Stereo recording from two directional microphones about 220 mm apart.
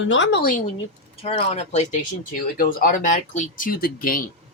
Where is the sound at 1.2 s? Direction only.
30° left (ahead or behind).